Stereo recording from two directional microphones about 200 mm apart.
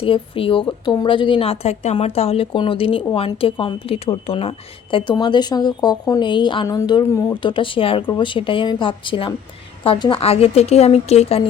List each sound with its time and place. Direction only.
0.0 s a woman's voice: 25° left (ahead or behind)